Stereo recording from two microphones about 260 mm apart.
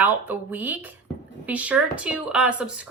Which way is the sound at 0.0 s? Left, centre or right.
Centre.